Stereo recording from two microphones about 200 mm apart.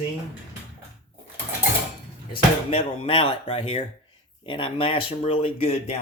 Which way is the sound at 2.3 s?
30° left (ahead or behind).